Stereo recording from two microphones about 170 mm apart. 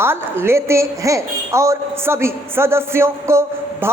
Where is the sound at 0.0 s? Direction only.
15° right (ahead or behind).